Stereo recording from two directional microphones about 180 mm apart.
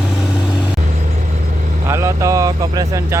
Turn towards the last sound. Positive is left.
turn(degrees=-20)  # may be behind; listen again after turning